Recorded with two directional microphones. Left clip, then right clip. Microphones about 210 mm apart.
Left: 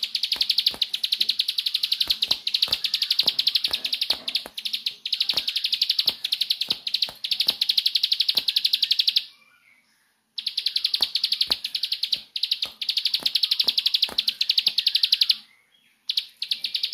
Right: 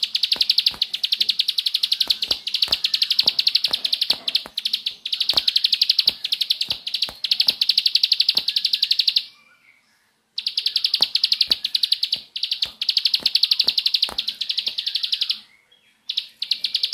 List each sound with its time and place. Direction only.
0.0 s bird: 10° right (ahead or behind)
6.2 s bird: centre (ahead or behind)
10.3 s bird: 10° right (ahead or behind)
14.1 s bird: 25° left (ahead or behind)
16.6 s bird: 15° right (ahead or behind)